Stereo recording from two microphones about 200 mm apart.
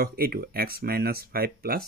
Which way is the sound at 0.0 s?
50° right (ahead or behind).